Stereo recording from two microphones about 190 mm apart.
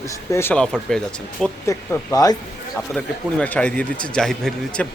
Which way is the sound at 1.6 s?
15° left (ahead or behind).